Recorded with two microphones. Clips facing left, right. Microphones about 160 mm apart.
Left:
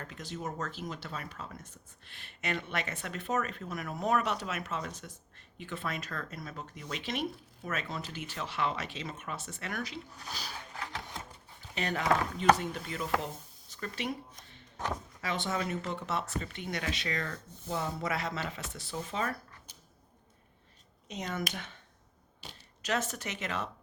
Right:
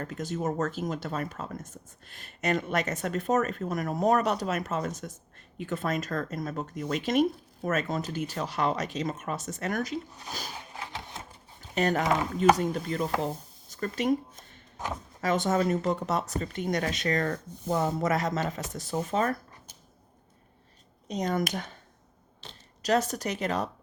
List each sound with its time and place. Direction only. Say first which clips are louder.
0.0 s speech: right 8 dB; 45° right (ahead or behind)
10.5 s printer: right 2 dB; 20° right (ahead or behind)
11.7 s speech: right 5 dB; 45° right (ahead or behind)
15.2 s speech: right 9 dB; 45° right (ahead or behind)
21.1 s speech: right 8 dB; 40° right (ahead or behind)
22.8 s speech: right 8 dB; 40° right (ahead or behind)